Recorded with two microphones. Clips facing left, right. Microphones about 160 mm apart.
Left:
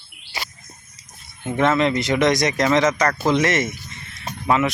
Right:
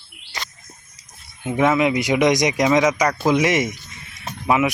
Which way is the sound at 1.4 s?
10° right (ahead or behind).